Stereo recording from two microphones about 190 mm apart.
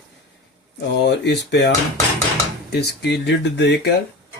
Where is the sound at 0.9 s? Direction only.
65° left (ahead or behind).